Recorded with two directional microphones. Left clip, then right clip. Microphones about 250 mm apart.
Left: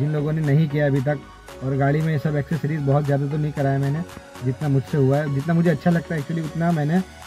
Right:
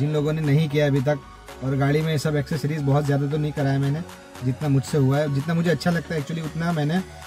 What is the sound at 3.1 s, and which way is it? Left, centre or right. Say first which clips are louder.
Speech: even; centre.